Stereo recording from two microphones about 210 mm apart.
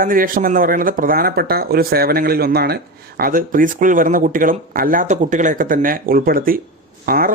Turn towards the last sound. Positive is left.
turn(degrees=-45)  # may be behind; listen again after turning